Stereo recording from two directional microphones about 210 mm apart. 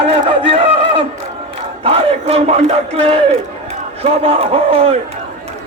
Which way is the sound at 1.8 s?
30° right (ahead or behind).